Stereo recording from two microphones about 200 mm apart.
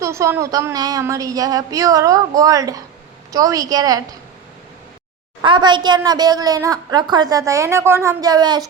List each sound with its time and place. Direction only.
0.0 s a woman's voice: 15° right (ahead or behind)
5.4 s a woman's voice: 25° right (ahead or behind)